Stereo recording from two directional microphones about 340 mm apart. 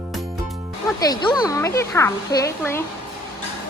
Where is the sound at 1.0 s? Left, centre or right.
Centre.